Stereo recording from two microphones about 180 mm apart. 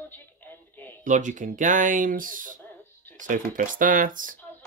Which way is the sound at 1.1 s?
45° right (ahead or behind).